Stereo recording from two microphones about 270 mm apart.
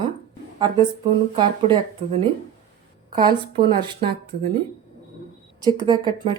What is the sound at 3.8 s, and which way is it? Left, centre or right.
Speech, centre.